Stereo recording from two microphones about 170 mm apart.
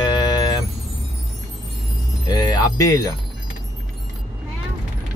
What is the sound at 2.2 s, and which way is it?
Jingle bell, 25° left (ahead or behind).